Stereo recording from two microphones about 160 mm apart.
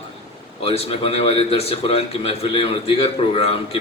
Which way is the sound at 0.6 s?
35° left (ahead or behind).